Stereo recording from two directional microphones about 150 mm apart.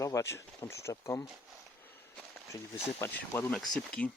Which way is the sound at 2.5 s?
15° left (ahead or behind).